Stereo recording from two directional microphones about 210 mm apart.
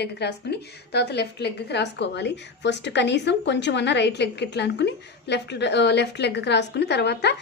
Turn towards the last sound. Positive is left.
turn(degrees=55)  # may be behind; listen again after turning